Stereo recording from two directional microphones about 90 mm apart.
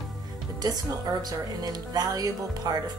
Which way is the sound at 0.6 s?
45° right (ahead or behind).